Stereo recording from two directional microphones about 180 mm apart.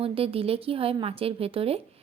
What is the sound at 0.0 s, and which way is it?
A woman's voice, 30° right (ahead or behind).